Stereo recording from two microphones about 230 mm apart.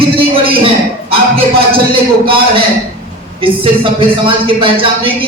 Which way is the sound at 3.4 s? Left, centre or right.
Right.